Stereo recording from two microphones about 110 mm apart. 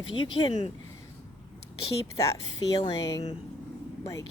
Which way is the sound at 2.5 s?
40° left (ahead or behind).